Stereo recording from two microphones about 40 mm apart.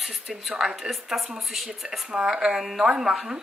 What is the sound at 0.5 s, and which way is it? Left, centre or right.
Speech, centre.